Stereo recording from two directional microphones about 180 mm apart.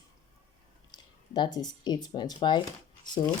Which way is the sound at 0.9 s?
25° left (ahead or behind).